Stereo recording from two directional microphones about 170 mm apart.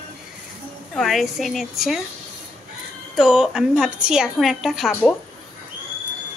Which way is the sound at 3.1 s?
5° right (ahead or behind).